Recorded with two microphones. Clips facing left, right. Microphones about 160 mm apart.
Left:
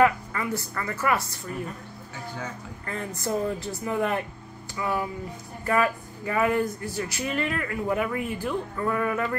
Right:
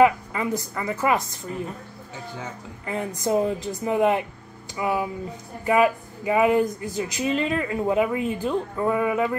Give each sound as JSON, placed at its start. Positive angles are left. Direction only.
{"t": 0.0, "sound": "speech", "side_deg": -20}